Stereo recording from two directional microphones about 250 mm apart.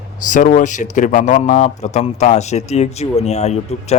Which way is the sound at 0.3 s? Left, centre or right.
Left.